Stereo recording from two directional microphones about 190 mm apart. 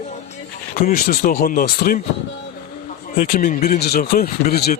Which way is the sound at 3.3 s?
45° left (ahead or behind).